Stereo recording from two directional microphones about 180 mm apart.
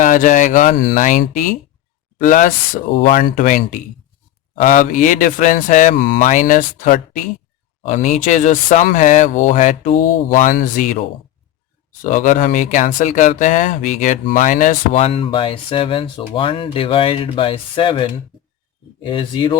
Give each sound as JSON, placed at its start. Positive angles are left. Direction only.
{"t": 0.0, "sound": "speech", "side_deg": 45}
{"t": 12.0, "sound": "speech", "side_deg": 45}